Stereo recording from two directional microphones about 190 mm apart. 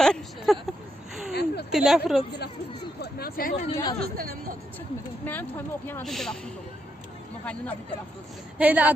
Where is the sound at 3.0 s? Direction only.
55° left (ahead or behind).